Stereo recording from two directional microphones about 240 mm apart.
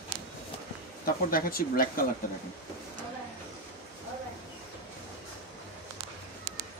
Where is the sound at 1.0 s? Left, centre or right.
Left.